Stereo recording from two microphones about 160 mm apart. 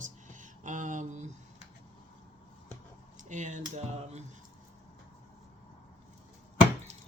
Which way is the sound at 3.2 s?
50° right (ahead or behind).